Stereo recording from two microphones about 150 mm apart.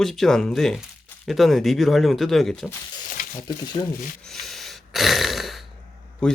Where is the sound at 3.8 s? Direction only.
35° left (ahead or behind).